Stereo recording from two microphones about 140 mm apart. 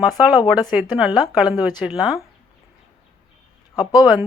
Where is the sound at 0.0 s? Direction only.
5° right (ahead or behind).